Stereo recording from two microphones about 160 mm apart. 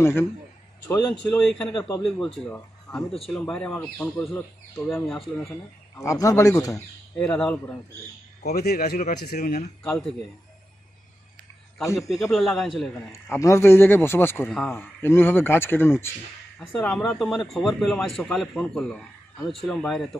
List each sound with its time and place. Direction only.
0.0 s a man's voice: 15° left (ahead or behind)
1.7 s speech: 25° left (ahead or behind)
2.0 s a man's voice: 5° left (ahead or behind)
5.9 s speech: 20° left (ahead or behind)
7.2 s a man's voice: 5° left (ahead or behind)
8.4 s speech: 80° left
11.8 s speech: 20° left (ahead or behind)
12.1 s a man's voice: centre (ahead or behind)
13.1 s a man's voice: 15° left (ahead or behind); by 20.2 s centre (ahead or behind)